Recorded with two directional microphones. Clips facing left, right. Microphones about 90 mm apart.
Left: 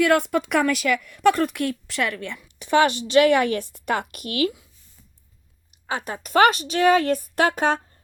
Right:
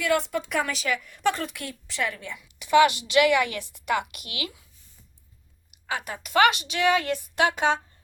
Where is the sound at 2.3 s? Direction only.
35° left (ahead or behind).